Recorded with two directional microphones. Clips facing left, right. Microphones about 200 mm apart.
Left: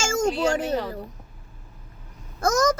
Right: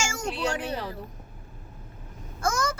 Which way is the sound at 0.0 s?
45° left (ahead or behind).